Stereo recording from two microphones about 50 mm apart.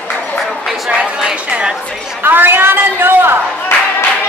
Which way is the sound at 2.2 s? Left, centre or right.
Right.